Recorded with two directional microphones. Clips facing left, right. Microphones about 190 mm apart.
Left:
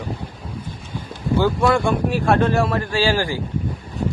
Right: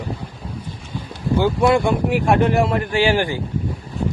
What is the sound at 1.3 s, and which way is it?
Speech, 20° right (ahead or behind).